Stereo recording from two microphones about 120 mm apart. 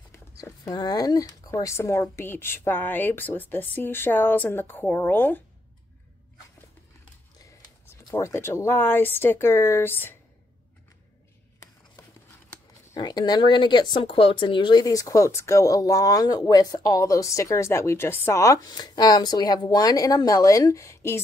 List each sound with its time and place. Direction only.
0.4 s speech: 30° left (ahead or behind); by 5.4 s 15° left (ahead or behind)
8.1 s speech: 20° left (ahead or behind)
12.9 s speech: 35° left (ahead or behind)